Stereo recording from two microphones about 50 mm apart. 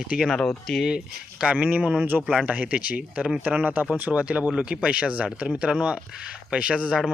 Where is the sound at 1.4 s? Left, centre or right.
Right.